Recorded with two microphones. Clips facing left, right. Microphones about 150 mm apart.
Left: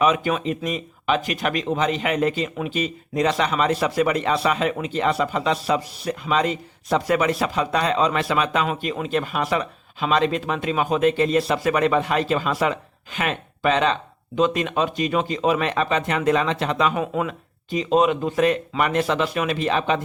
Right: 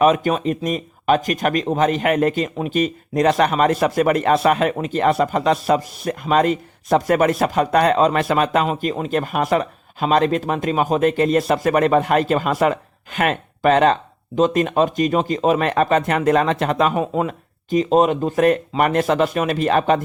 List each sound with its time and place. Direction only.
0.0 s speech: 45° right (ahead or behind)
17.0 s speech: 35° right (ahead or behind)